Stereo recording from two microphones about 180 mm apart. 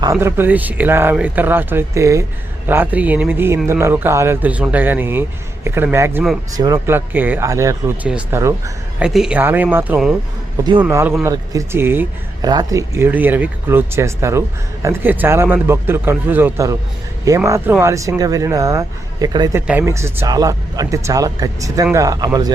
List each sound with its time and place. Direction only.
0.0 s speech: 15° right (ahead or behind)
8.0 s speech: 5° right (ahead or behind)
8.4 s speech: 15° right (ahead or behind)
9.0 s speech: 5° right (ahead or behind); by 22.5 s 20° right (ahead or behind)